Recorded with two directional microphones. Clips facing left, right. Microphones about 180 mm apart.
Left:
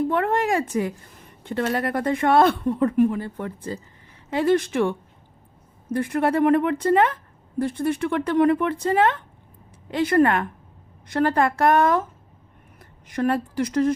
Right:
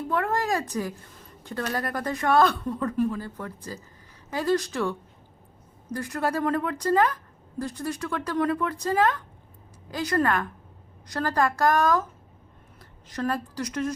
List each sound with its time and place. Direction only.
0.1 s a woman's voice: 25° left (ahead or behind)
13.1 s a woman's voice: 25° left (ahead or behind)